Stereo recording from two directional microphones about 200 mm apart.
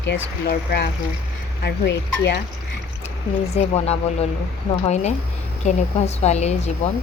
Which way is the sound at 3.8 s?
30° left (ahead or behind).